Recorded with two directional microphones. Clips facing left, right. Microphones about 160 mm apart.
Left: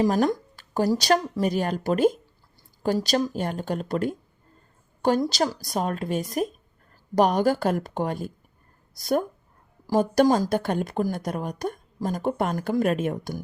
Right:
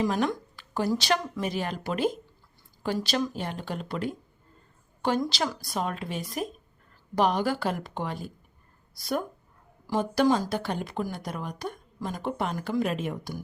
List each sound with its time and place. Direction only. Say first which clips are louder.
0.0 s a woman's voice: left 5 dB; 40° left (ahead or behind)